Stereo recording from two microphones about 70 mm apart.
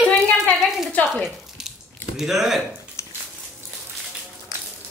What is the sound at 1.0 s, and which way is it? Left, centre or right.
Speech, left.